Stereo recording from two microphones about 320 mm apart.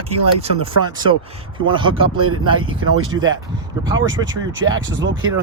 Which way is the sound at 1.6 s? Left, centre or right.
Centre.